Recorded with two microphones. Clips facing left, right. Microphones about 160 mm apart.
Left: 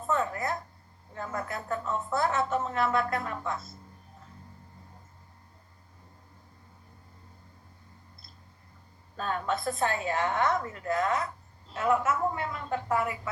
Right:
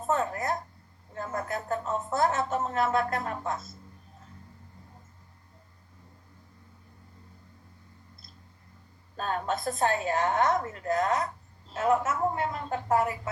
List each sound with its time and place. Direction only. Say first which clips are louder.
0.1 s a sound: right 1 dB; 45° right (ahead or behind)
1.2 s speech: right 2 dB; 45° right (ahead or behind)
9.1 s a woman's voice: even; 40° right (ahead or behind)